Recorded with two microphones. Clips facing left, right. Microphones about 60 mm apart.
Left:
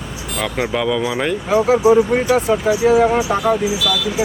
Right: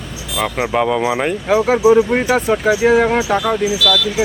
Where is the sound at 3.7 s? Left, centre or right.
Centre.